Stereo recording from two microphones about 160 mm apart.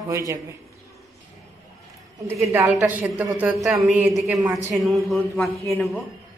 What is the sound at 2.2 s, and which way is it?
A woman's voice, 15° right (ahead or behind).